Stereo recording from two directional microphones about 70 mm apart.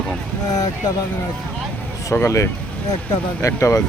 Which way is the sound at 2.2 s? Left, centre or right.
Left.